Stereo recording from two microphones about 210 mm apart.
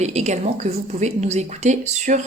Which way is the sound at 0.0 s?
30° right (ahead or behind).